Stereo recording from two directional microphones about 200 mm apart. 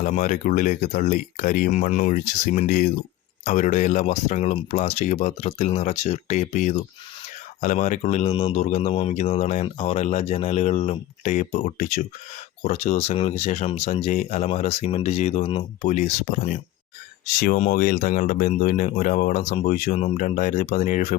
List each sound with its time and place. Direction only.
0.0 s speech: 40° left (ahead or behind)